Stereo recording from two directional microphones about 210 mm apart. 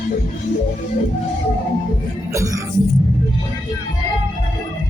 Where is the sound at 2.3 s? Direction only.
15° right (ahead or behind).